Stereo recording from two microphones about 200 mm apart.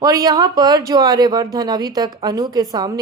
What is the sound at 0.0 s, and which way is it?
A woman's voice, 15° right (ahead or behind).